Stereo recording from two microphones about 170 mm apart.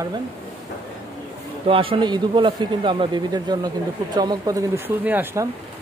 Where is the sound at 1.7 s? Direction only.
30° right (ahead or behind).